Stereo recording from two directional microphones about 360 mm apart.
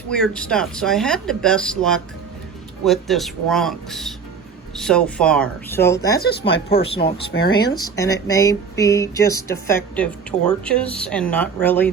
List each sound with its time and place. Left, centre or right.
0.1 s speech: centre
6.5 s speech: left
6.9 s speech: centre
7.3 s speech: left
7.7 s speech: centre